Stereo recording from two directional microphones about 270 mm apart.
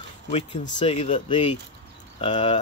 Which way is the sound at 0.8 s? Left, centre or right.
Left.